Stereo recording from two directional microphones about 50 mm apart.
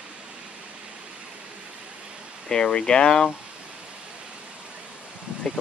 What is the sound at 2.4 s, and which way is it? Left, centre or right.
Speech, centre.